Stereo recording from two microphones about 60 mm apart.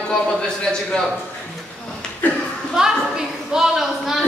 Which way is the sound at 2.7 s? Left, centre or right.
Centre.